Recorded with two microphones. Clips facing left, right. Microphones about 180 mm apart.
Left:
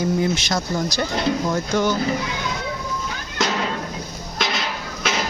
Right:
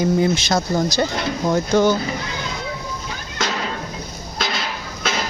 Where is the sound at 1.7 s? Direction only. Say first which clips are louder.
Right 5 dB; 25° right (ahead or behind).